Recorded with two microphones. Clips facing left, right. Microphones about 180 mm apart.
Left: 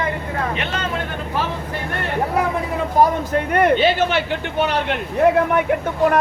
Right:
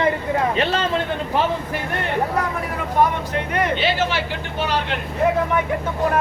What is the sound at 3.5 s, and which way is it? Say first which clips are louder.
Speech: left 6 dB; 55° left (ahead or behind).